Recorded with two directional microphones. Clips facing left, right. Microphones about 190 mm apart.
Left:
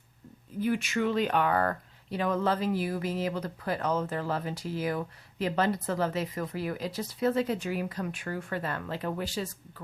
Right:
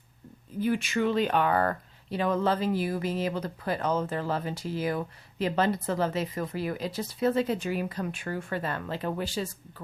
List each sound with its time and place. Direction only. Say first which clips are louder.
0.6 s speech: right 1 dB; 30° right (ahead or behind)